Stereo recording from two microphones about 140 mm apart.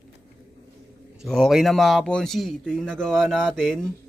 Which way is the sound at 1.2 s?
Centre (ahead or behind).